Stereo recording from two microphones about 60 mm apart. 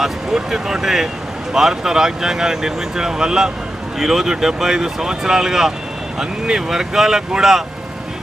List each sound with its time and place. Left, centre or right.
0.0 s speech: centre